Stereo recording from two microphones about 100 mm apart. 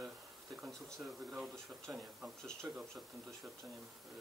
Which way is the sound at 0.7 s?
5° left (ahead or behind).